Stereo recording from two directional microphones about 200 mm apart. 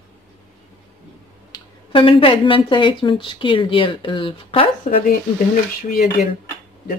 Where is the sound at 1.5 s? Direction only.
25° left (ahead or behind).